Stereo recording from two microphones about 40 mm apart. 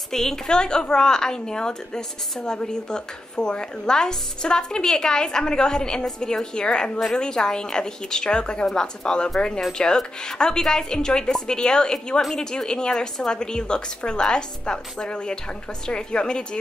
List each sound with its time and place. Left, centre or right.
0.1 s a woman's voice: centre